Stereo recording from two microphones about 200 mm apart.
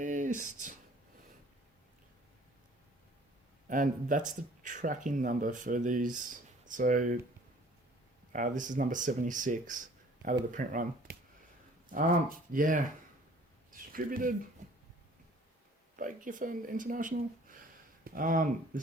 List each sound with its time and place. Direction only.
0.0 s a sound: 40° right (ahead or behind)
3.7 s speech: 40° right (ahead or behind)
8.3 s speech: 40° right (ahead or behind)
16.0 s speech: 40° right (ahead or behind)